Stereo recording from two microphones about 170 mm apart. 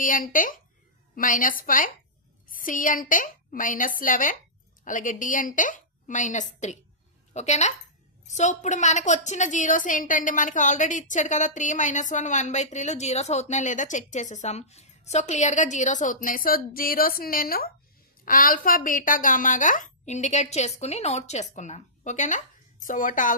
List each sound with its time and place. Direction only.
0.0 s a woman's voice: 50° left (ahead or behind)